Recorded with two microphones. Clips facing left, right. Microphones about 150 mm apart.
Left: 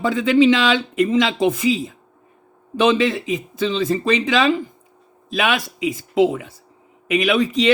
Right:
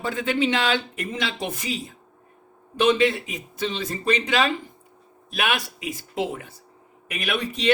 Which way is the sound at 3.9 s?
90° left.